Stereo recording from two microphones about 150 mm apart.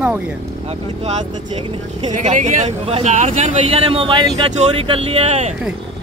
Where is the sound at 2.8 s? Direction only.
45° right (ahead or behind).